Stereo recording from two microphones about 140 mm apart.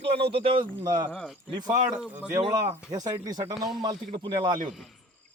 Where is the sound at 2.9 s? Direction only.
30° right (ahead or behind).